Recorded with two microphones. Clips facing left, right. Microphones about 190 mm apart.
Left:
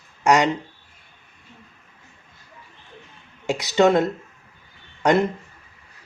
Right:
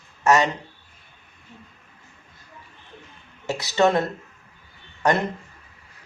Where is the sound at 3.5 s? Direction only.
15° left (ahead or behind).